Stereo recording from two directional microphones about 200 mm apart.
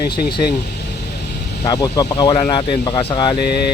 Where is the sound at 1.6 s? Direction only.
20° left (ahead or behind).